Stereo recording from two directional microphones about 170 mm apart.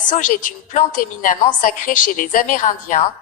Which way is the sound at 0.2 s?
50° left (ahead or behind).